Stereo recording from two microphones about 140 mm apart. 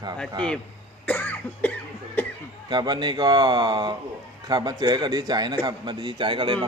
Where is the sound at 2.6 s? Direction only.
35° right (ahead or behind).